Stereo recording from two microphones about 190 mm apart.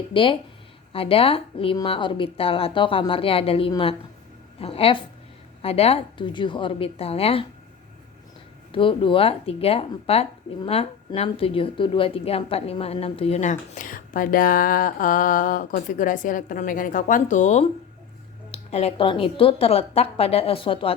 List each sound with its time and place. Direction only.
0.1 s a woman's voice: 25° left (ahead or behind)
8.7 s speech: 25° left (ahead or behind)